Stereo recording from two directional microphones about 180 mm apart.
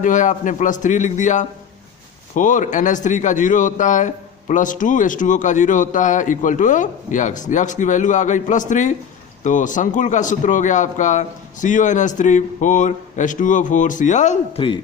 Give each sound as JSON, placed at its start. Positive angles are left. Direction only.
{"t": 0.0, "sound": "a man's voice", "side_deg": 45}